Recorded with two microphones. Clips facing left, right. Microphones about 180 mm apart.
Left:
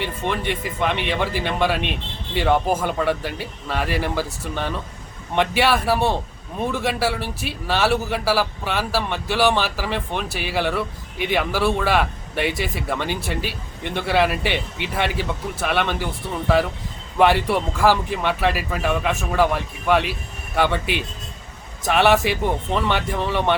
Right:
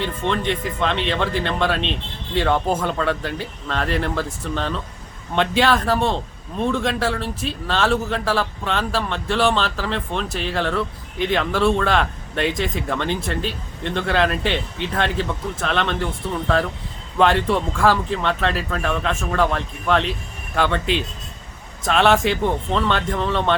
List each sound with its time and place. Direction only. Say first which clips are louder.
0.0 s a man's voice: right 2 dB; 10° left (ahead or behind)